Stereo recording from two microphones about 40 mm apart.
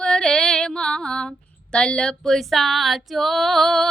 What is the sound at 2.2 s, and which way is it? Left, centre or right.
Female singing, centre.